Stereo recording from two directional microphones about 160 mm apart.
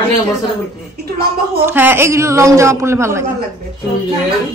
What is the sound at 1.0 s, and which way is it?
Speech, 85° right.